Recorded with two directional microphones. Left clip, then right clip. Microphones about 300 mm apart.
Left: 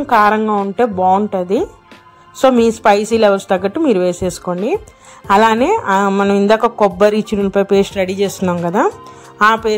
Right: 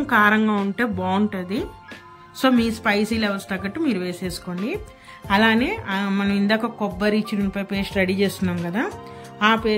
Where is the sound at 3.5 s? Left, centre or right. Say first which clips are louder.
Left 11 dB; left.